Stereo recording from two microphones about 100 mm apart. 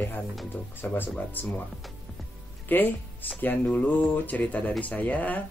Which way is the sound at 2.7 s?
20° left (ahead or behind).